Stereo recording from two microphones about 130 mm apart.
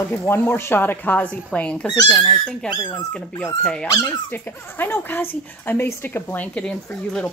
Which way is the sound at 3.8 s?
25° left (ahead or behind).